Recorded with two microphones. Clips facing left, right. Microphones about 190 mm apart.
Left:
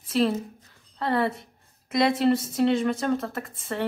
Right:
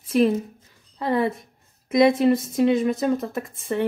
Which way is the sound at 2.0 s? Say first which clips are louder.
Right 4 dB; 15° right (ahead or behind).